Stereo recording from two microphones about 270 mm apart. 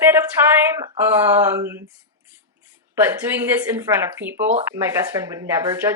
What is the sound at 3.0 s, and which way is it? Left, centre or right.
A woman's voice, centre.